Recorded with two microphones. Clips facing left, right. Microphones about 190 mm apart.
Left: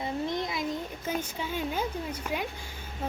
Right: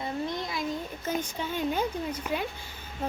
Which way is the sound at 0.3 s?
20° left (ahead or behind).